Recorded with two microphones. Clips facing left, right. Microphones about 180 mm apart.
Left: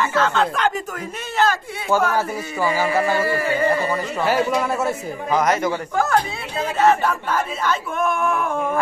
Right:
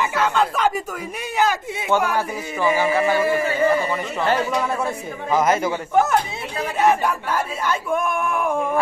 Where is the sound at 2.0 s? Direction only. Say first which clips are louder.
Left 2 dB; 15° right (ahead or behind).